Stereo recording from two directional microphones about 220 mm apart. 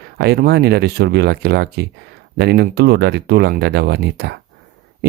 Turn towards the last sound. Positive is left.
turn(degrees=-50)  # may be behind; listen again after turning